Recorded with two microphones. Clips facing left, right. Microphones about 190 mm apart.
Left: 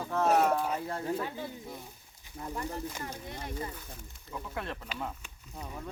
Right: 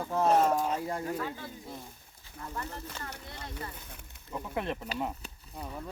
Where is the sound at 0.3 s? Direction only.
10° left (ahead or behind).